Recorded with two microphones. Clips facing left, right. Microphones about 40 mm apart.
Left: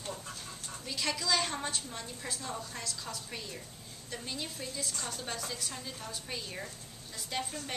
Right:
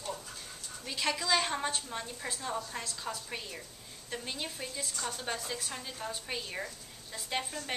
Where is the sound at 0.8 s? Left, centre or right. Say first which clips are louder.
Right 2 dB; centre.